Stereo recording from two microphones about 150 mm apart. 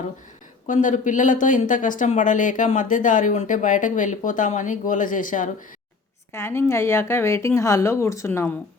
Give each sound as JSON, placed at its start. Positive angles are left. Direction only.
{"t": 0.7, "sound": "speech", "side_deg": 60}
{"t": 6.3, "sound": "speech", "side_deg": 15}